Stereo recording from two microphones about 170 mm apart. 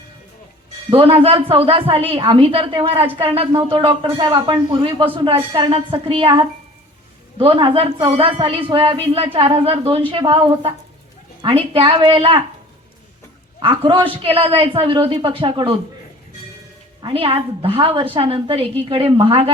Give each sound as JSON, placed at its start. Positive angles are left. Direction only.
{"t": 0.9, "sound": "a woman's voice", "side_deg": -35}
{"t": 13.6, "sound": "a woman's voice", "side_deg": -30}
{"t": 17.0, "sound": "a woman's voice", "side_deg": -30}